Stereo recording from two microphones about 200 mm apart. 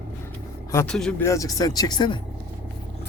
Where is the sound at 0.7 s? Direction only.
5° left (ahead or behind); by 2.2 s 20° left (ahead or behind).